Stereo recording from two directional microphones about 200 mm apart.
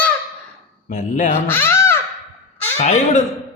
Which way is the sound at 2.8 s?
35° left (ahead or behind).